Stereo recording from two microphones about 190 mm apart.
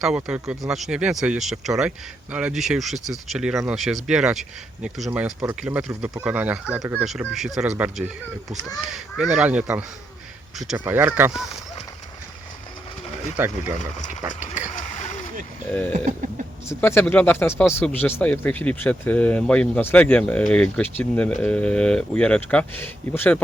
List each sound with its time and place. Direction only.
0.0 s speech: 5° right (ahead or behind)
10.8 s speech: 10° right (ahead or behind)
13.3 s speech: 5° right (ahead or behind)
14.8 s a sound: 40° left (ahead or behind)
15.9 s a sound: 40° right (ahead or behind)
16.6 s speech: 10° left (ahead or behind)